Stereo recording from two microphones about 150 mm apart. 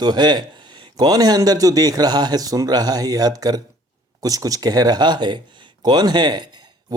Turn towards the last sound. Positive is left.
turn(degrees=-30)  # may be behind; listen again after turning